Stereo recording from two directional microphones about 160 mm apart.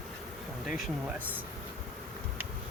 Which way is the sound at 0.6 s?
5° right (ahead or behind).